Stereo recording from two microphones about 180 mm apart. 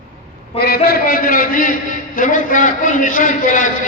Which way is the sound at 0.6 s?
60° left (ahead or behind).